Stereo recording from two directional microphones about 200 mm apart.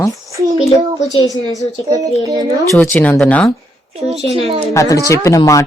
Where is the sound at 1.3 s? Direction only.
15° left (ahead or behind).